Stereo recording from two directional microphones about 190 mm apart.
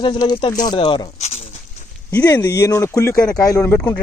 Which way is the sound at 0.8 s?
30° left (ahead or behind).